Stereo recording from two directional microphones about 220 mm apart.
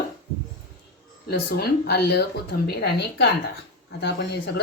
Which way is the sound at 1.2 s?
45° left (ahead or behind).